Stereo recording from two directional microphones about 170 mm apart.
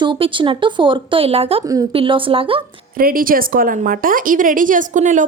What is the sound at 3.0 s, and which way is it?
A woman's voice, 55° right (ahead or behind).